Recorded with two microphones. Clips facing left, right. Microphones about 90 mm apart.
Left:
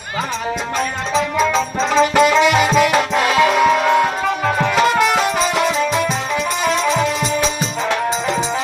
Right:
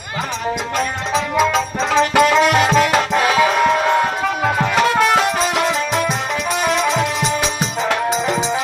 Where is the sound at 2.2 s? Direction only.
5° left (ahead or behind).